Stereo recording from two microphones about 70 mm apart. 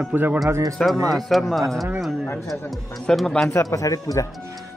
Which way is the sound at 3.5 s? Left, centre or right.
Left.